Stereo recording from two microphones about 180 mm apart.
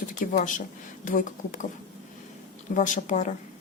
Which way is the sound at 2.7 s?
45° left (ahead or behind).